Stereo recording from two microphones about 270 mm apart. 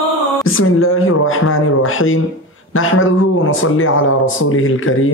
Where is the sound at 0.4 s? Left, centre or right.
Left.